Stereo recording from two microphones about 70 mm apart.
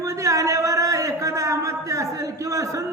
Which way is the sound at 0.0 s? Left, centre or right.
Right.